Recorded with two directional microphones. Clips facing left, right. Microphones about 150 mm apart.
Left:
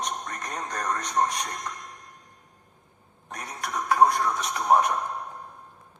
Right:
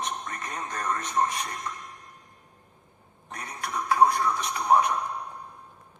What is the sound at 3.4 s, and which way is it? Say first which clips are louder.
Speech: left 1 dB; 15° left (ahead or behind).